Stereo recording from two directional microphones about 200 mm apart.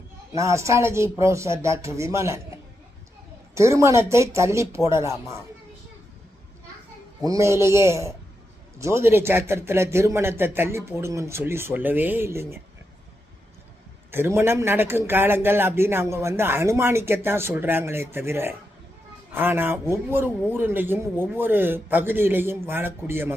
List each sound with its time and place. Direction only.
0.3 s a man's voice: 15° right (ahead or behind)
3.5 s a man's voice: 15° right (ahead or behind)
7.3 s a man's voice: 15° right (ahead or behind)
14.1 s a man's voice: 10° right (ahead or behind)